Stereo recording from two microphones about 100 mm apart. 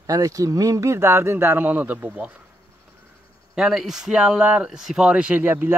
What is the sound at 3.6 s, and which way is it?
Speech, 5° right (ahead or behind).